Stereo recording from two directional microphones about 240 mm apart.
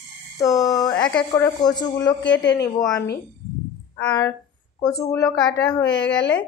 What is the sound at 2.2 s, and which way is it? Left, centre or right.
Speech, left.